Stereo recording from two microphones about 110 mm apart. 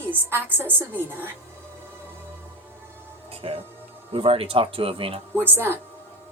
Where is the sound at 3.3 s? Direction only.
60° right (ahead or behind).